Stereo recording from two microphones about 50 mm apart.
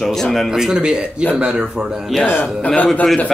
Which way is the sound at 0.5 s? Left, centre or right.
Centre.